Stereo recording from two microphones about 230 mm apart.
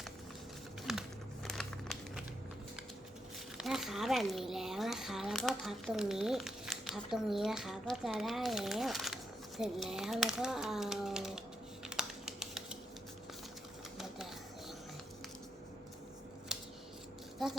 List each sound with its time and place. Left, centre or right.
0.9 s crumpling: centre
3.6 s speech: centre
9.6 s typing: centre
16.5 s scissors: centre
17.4 s speech: centre